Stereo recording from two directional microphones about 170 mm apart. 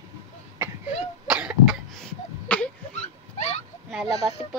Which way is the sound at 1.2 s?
5° right (ahead or behind).